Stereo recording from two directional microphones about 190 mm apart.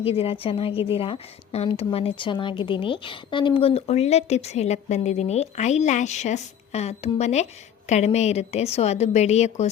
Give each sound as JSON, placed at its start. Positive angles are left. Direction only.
{"t": 0.0, "sound": "a woman's voice", "side_deg": 30}